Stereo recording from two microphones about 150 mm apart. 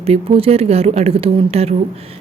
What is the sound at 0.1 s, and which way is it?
Speech, 40° right (ahead or behind).